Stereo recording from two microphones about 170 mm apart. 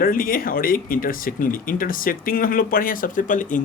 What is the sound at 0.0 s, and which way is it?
Speech, 55° left (ahead or behind).